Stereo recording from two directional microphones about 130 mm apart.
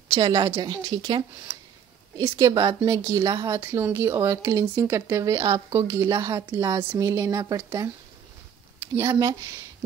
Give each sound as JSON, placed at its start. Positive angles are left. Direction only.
{"t": 0.2, "sound": "speech", "side_deg": -35}
{"t": 1.3, "sound": "speech", "side_deg": -15}
{"t": 2.6, "sound": "speech", "side_deg": -30}